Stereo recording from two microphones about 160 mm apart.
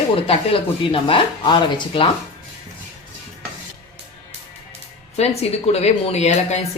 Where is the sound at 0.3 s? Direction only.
35° left (ahead or behind).